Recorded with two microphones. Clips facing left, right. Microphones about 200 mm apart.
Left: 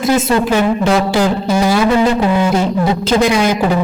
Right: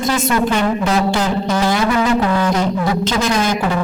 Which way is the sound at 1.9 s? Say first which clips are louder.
Left 3 dB; 30° left (ahead or behind).